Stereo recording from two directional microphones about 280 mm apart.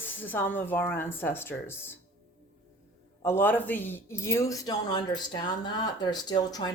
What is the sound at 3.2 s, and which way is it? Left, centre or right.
Speech, centre.